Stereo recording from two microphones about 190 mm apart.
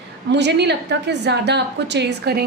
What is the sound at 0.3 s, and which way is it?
A woman's voice, 65° right (ahead or behind).